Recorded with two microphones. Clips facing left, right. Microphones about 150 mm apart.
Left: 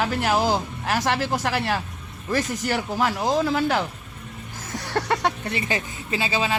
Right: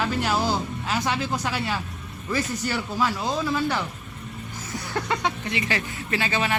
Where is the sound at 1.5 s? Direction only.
50° left (ahead or behind).